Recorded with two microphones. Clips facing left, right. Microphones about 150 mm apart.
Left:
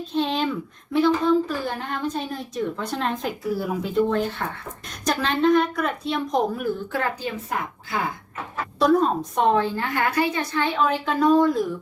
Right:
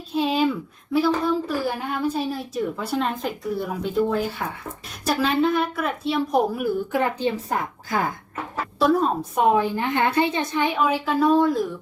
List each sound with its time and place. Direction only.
0.1 s a woman's voice: 5° right (ahead or behind)
7.2 s a woman's voice: 30° right (ahead or behind)
8.8 s a woman's voice: centre (ahead or behind)